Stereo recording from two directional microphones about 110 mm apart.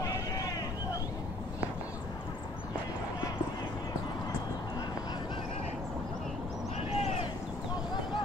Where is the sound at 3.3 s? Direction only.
40° left (ahead or behind).